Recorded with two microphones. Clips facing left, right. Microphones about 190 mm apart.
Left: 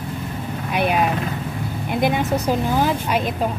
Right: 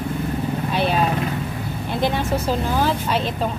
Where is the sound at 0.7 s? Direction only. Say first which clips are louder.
Left 2 dB; 15° left (ahead or behind).